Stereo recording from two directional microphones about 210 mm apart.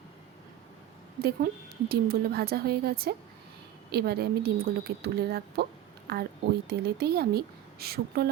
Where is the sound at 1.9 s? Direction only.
45° right (ahead or behind).